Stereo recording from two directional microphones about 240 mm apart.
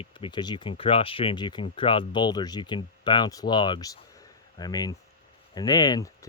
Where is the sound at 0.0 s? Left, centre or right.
Centre.